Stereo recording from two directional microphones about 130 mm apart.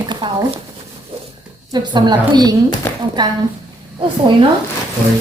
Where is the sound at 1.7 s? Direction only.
35° right (ahead or behind).